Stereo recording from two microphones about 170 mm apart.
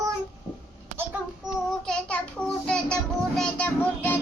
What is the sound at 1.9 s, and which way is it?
Speech, 5° left (ahead or behind).